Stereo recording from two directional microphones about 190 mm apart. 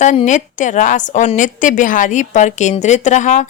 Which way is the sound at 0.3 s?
40° left (ahead or behind).